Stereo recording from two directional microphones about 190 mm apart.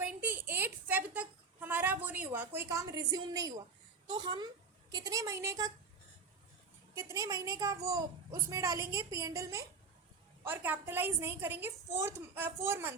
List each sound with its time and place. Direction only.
0.0 s a sound: 10° right (ahead or behind)
4.0 s a child's voice: 25° right (ahead or behind)
6.9 s a woman's voice: 15° right (ahead or behind)